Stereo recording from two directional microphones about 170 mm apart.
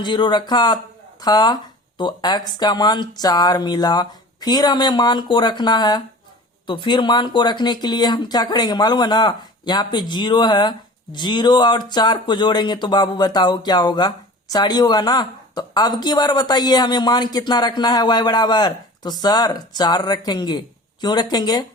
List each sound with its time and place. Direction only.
0.0 s speech: 25° left (ahead or behind)